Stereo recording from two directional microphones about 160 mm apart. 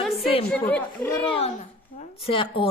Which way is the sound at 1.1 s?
30° left (ahead or behind).